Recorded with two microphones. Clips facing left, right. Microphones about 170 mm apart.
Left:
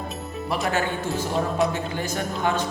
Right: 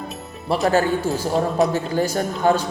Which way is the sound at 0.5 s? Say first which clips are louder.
Right 7 dB; 35° right (ahead or behind).